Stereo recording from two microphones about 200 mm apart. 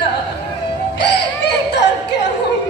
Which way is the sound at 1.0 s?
60° left (ahead or behind).